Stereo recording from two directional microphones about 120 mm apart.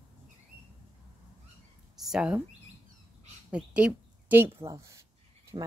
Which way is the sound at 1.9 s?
5° right (ahead or behind).